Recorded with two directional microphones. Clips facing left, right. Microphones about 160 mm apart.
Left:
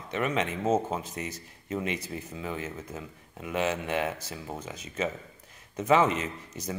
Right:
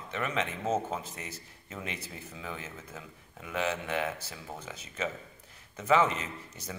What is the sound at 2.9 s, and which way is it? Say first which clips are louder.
Speech: left 6 dB; 20° left (ahead or behind).